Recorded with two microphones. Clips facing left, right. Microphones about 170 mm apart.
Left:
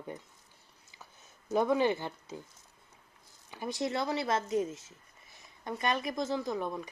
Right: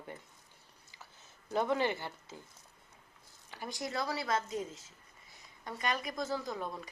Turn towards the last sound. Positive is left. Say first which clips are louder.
# left 5 dB
turn(degrees=20)  # may be behind; listen again after turning